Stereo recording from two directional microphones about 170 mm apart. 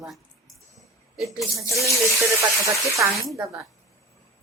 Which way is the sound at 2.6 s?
20° right (ahead or behind).